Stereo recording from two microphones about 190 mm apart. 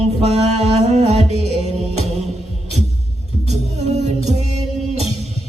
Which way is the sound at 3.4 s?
35° right (ahead or behind).